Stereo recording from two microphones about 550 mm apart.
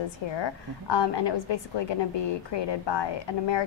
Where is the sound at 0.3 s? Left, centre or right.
Left.